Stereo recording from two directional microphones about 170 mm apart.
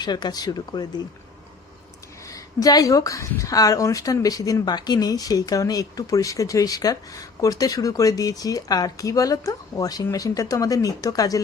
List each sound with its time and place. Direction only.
0.0 s a woman's voice: 25° left (ahead or behind)
2.3 s a woman's voice: 20° left (ahead or behind)